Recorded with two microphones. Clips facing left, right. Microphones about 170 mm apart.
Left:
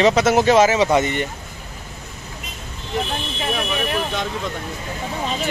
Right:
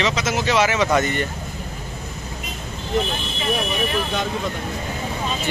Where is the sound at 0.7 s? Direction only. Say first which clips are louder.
Left 2 dB; 25° left (ahead or behind).